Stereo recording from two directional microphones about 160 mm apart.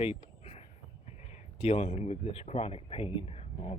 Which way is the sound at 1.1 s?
40° left (ahead or behind).